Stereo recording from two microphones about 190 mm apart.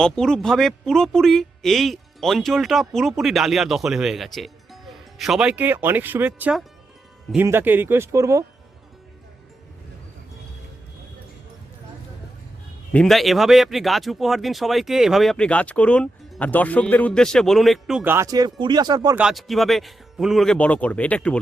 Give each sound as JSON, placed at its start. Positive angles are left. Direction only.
{"t": 0.0, "sound": "speech", "side_deg": 5}
{"t": 12.9, "sound": "speech", "side_deg": 5}
{"t": 19.1, "sound": "speech", "side_deg": 0}